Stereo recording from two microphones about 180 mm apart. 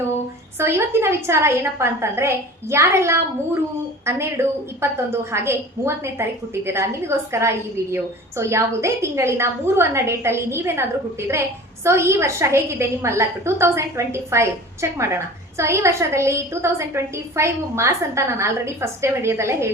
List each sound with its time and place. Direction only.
0.6 s a woman's voice: 15° right (ahead or behind)